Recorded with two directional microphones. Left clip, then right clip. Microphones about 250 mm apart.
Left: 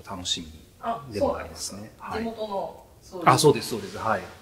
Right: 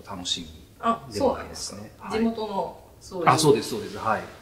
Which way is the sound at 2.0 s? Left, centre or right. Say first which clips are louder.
Right 3 dB; centre.